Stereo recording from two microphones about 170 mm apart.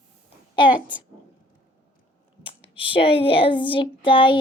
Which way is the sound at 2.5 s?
30° left (ahead or behind).